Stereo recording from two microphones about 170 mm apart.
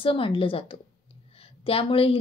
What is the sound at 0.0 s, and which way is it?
A woman's voice, 30° left (ahead or behind).